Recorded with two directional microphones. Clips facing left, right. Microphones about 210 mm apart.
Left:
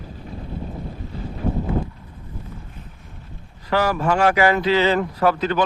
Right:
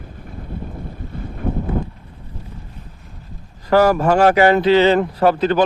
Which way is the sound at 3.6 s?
45° right (ahead or behind).